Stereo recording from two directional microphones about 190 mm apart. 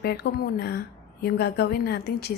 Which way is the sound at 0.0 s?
60° left (ahead or behind).